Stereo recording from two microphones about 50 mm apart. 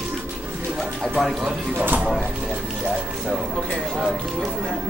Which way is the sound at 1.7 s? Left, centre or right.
Right.